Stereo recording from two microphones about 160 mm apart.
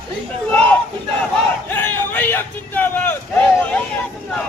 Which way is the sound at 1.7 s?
10° left (ahead or behind).